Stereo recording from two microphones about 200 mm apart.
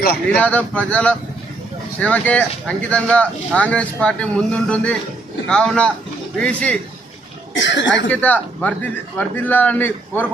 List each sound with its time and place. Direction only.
0.3 s a man's voice: 5° left (ahead or behind)
7.5 s speech: 65° left (ahead or behind)
8.1 s a man's voice: 10° left (ahead or behind)